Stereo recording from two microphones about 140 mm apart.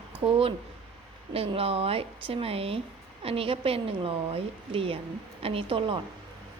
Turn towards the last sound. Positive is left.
turn(degrees=-40)  # may be behind; listen again after turning